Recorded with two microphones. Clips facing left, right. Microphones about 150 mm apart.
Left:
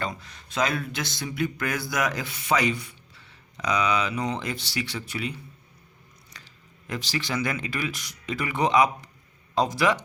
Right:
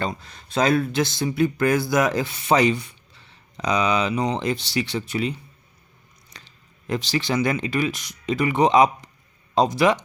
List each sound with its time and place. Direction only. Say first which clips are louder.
0.1 s speech: right 7 dB; 30° right (ahead or behind)
6.3 s speech: right 3 dB; 25° right (ahead or behind)